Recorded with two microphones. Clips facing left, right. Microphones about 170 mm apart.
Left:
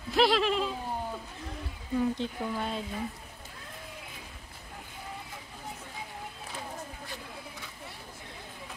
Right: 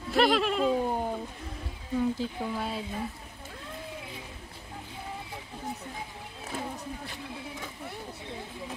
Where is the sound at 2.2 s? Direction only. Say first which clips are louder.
Right 1 dB; 5° right (ahead or behind).